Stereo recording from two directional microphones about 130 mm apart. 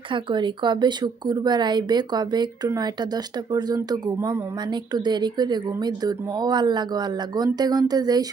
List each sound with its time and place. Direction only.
0.1 s speech: 35° right (ahead or behind)